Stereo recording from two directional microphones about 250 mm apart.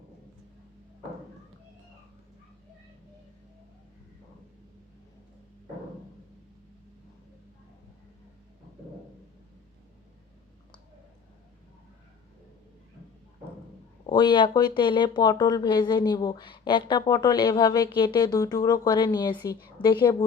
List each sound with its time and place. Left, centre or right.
14.1 s speech: centre